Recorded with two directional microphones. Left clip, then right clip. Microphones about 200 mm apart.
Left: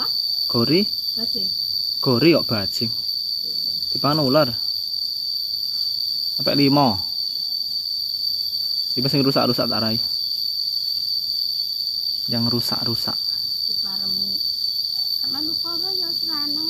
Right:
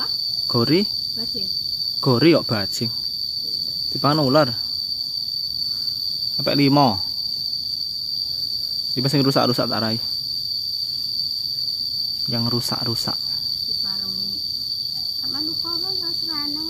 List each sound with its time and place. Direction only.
0.6 s a man's voice: 15° right (ahead or behind)
2.0 s a man's voice: 15° right (ahead or behind)
4.0 s a man's voice: 15° right (ahead or behind)
6.4 s a man's voice: 10° right (ahead or behind)
9.1 s a man's voice: 15° right (ahead or behind)